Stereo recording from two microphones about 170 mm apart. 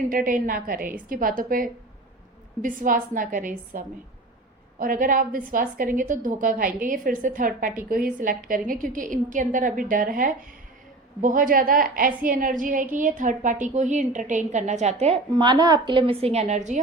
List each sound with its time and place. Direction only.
0.1 s a woman's voice: 55° right (ahead or behind)
15.3 s a woman's voice: 25° right (ahead or behind); by 16.8 s 45° right (ahead or behind)